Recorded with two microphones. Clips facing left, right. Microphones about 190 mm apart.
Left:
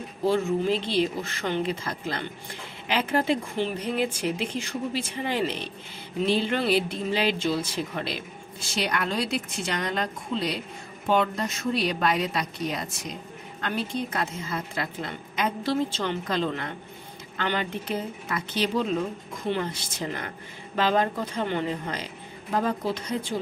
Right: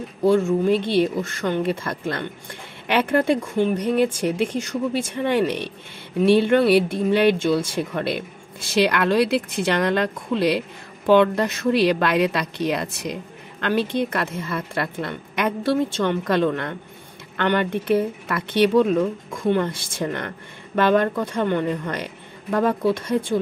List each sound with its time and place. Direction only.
0.2 s speech: 50° right (ahead or behind)
8.6 s speech: 65° right (ahead or behind)